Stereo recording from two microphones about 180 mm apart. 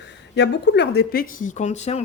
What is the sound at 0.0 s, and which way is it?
Speech, 75° left (ahead or behind).